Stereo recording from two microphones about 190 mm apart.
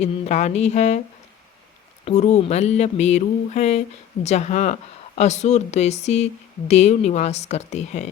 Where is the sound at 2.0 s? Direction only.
35° left (ahead or behind).